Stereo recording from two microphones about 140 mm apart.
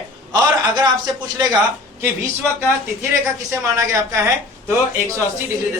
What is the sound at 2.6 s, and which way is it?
Speech, 20° right (ahead or behind).